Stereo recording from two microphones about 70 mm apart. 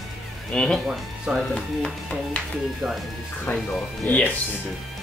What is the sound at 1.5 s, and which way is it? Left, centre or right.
Speech, centre.